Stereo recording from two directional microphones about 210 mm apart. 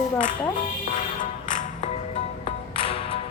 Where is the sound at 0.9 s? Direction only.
40° left (ahead or behind).